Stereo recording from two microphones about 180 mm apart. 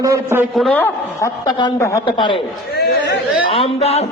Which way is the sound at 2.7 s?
65° left (ahead or behind).